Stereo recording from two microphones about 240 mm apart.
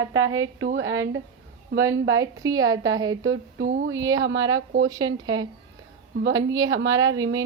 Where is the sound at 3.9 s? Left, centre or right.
Centre.